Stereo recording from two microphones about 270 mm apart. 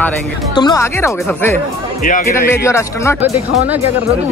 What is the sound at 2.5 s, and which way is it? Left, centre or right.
Speech, centre.